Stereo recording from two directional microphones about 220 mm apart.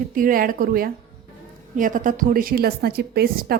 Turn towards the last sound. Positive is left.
turn(degrees=-45)  # may be behind; listen again after turning